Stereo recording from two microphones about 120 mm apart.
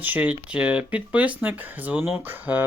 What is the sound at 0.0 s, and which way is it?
Speech, 15° right (ahead or behind).